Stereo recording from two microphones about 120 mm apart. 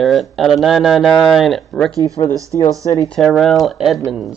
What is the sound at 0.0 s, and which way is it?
Speech, centre (ahead or behind).